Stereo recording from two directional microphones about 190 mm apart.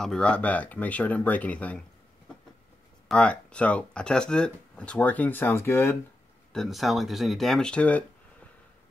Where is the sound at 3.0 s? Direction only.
5° left (ahead or behind).